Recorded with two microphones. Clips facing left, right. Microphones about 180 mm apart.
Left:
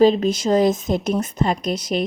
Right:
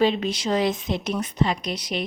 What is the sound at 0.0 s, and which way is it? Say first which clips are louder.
A woman's voice: left 7 dB; 40° left (ahead or behind).